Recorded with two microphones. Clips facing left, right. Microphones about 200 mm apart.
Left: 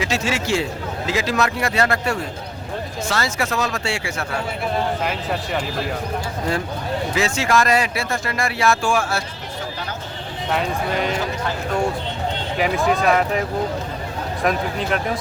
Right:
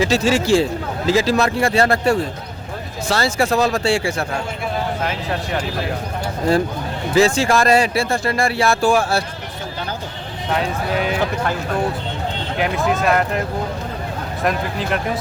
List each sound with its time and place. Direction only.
0.0 s speech: 35° right (ahead or behind)
7.1 s speech: 35° right (ahead or behind)
10.5 s speech: centre (ahead or behind)
12.5 s speech: centre (ahead or behind)
14.4 s speech: centre (ahead or behind)